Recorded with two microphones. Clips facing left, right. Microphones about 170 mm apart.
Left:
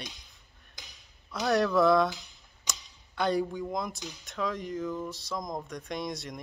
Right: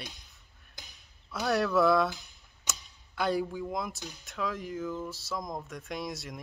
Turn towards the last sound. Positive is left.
turn(degrees=-5)  # may be behind; listen again after turning